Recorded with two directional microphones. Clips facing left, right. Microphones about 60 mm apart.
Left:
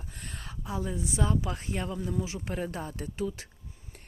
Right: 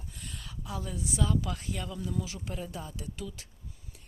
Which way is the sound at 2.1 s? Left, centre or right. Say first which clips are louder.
Left 3 dB; left.